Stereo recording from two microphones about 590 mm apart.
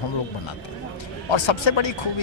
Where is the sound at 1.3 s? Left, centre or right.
Left.